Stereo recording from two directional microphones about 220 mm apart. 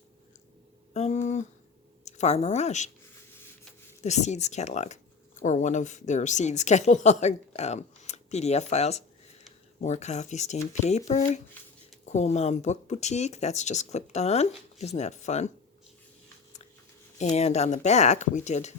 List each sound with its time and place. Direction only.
0.9 s a woman's voice: 30° left (ahead or behind)
4.0 s a woman's voice: 30° left (ahead or behind)
17.2 s a woman's voice: 30° left (ahead or behind)